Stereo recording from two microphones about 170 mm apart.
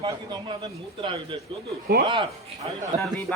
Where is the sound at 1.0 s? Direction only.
30° right (ahead or behind).